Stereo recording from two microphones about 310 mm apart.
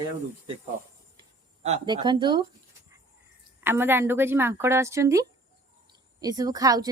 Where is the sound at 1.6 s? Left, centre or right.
Centre.